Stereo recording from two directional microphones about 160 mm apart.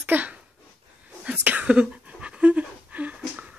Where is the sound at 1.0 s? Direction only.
5° right (ahead or behind).